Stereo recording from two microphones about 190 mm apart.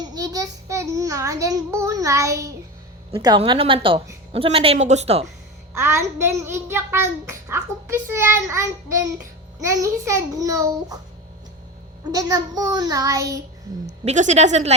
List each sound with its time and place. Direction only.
0.0 s a child's voice: 20° right (ahead or behind)
5.7 s a child's voice: 15° right (ahead or behind)
12.1 s a child's voice: 20° right (ahead or behind)
14.0 s a woman's voice: 40° right (ahead or behind)